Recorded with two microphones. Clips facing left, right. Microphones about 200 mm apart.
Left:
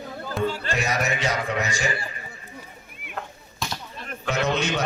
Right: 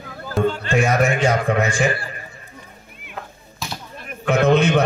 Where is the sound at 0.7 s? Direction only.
50° right (ahead or behind).